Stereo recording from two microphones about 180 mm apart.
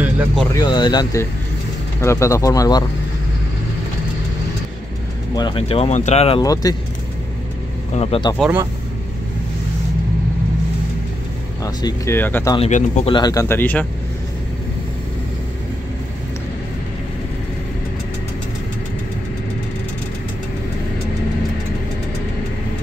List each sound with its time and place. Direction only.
0.6 s speech: 25° left (ahead or behind)
5.3 s speech: 25° left (ahead or behind)
6.4 s speech: 20° left (ahead or behind)
7.9 s speech: 30° left (ahead or behind)
11.6 s speech: 20° left (ahead or behind)
12.5 s speech: 40° left (ahead or behind)
13.1 s speech: 20° left (ahead or behind)